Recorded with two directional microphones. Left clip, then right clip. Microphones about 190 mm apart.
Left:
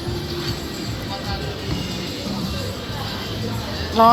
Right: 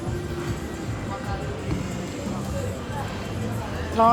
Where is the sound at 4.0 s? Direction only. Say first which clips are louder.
Left 5 dB; 15° left (ahead or behind).